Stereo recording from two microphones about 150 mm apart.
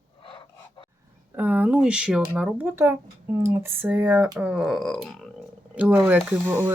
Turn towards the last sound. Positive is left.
turn(degrees=-15)  # may be behind; listen again after turning